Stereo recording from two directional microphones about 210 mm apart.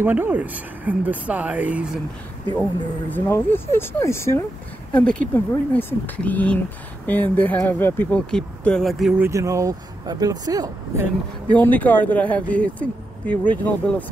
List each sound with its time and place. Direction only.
0.0 s speech: 10° right (ahead or behind)
3.1 s speech: 10° left (ahead or behind)
9.3 s speech: 15° right (ahead or behind)
11.4 s speech: 5° left (ahead or behind)